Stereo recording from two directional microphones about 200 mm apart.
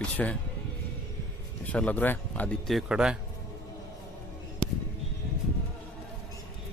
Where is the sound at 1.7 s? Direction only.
5° left (ahead or behind).